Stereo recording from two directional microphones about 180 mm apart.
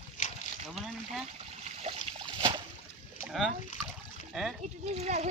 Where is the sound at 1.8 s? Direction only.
25° right (ahead or behind).